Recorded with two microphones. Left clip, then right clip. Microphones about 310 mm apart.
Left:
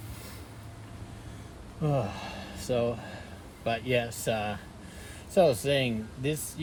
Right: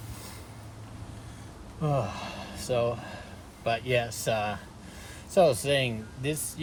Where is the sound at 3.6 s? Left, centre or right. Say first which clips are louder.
Right 1 dB; centre.